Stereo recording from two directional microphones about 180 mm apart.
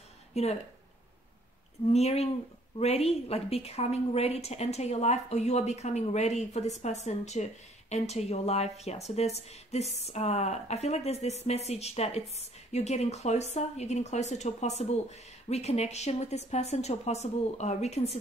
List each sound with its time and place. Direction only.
0.3 s speech: 35° left (ahead or behind)
1.9 s speech: 35° left (ahead or behind)